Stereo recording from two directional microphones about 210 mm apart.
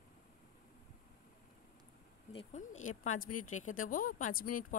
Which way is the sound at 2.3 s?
30° left (ahead or behind).